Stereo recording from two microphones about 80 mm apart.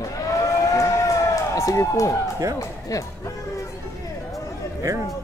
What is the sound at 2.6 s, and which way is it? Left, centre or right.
Speech, left.